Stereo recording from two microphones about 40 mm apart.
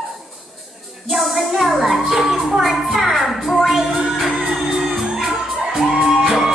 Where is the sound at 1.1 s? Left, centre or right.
Centre.